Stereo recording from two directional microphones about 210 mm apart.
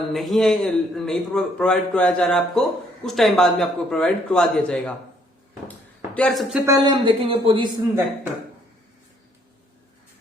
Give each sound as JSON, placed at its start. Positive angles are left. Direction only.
{"t": 0.1, "sound": "a man's voice", "side_deg": 0}
{"t": 6.1, "sound": "a man's voice", "side_deg": 0}
{"t": 6.7, "sound": "speech", "side_deg": -20}